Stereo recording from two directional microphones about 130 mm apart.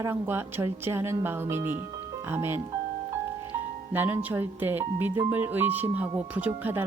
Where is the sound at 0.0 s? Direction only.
20° right (ahead or behind).